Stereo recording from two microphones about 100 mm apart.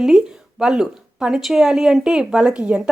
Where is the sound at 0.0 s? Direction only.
5° right (ahead or behind).